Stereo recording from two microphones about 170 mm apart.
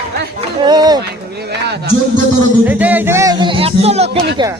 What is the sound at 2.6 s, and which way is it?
Music, 10° right (ahead or behind).